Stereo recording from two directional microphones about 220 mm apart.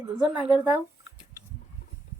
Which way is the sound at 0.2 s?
5° right (ahead or behind).